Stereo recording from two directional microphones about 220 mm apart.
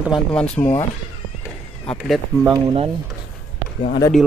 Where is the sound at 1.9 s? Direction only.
Centre (ahead or behind).